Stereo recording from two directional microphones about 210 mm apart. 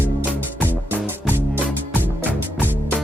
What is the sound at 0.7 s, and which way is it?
Music, 10° right (ahead or behind).